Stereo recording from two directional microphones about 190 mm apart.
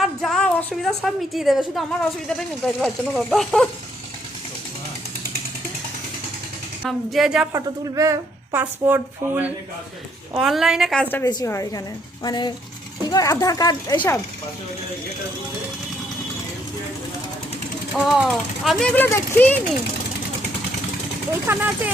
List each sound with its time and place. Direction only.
0.0 s a woman's voice: centre (ahead or behind)
6.8 s speech: centre (ahead or behind)
7.5 s speech: 15° right (ahead or behind); by 11.3 s 10° left (ahead or behind)
11.3 s speech: 20° left (ahead or behind)
17.9 s speech: centre (ahead or behind)
21.4 s speech: 10° right (ahead or behind)